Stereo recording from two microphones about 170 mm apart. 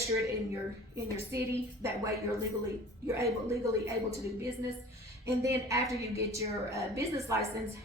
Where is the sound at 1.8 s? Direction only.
20° right (ahead or behind).